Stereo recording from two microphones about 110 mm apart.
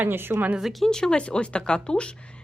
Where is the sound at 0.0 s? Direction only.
20° right (ahead or behind).